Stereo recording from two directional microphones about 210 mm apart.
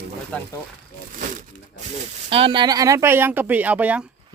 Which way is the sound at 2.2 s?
25° right (ahead or behind).